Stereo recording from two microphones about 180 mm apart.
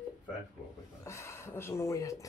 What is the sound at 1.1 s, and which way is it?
Speech, 15° left (ahead or behind).